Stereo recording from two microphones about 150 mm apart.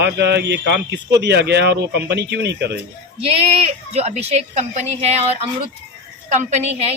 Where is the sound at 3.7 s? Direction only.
45° right (ahead or behind).